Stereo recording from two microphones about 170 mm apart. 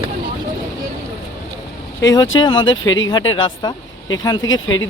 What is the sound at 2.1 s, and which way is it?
Speech, 25° left (ahead or behind).